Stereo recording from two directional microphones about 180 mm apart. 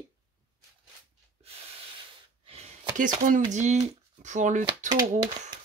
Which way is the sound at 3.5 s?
40° right (ahead or behind).